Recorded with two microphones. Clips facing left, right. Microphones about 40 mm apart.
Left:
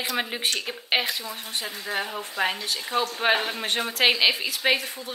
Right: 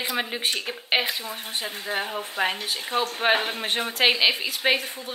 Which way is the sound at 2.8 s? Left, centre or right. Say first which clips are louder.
Even; right.